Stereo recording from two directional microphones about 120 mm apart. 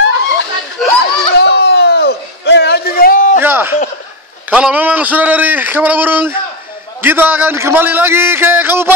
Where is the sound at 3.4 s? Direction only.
20° right (ahead or behind).